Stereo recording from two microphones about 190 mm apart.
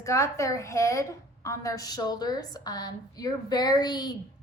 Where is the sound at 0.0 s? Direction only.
15° left (ahead or behind).